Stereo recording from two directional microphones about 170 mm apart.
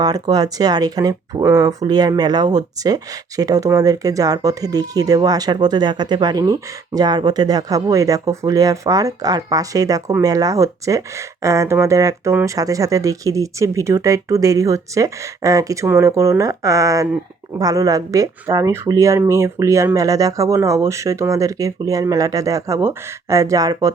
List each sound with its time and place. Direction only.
0.0 s speech: 20° right (ahead or behind)